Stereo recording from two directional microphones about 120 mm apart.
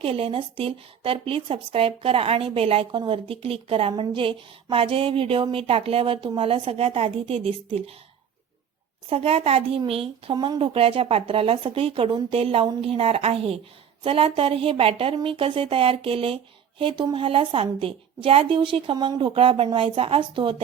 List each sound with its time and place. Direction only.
0.0 s a woman's voice: 50° right (ahead or behind)
9.0 s a woman's voice: 55° right (ahead or behind)
10.3 s speech: 35° right (ahead or behind)
10.6 s a woman's voice: 55° right (ahead or behind)